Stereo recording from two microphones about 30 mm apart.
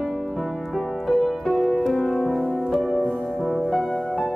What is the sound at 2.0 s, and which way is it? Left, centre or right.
Music, centre.